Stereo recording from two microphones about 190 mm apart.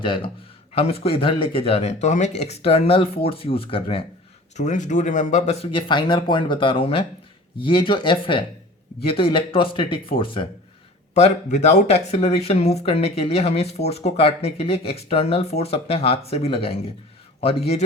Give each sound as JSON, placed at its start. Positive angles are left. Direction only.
{"t": 0.0, "sound": "speech", "side_deg": 25}
{"t": 4.5, "sound": "speech", "side_deg": 40}